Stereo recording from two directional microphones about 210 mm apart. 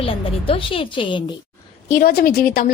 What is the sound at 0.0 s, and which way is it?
A woman's voice, 25° left (ahead or behind).